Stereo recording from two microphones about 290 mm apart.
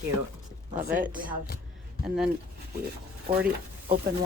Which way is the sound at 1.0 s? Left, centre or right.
Right.